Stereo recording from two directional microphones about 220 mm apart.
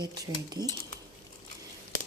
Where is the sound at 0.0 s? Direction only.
20° right (ahead or behind).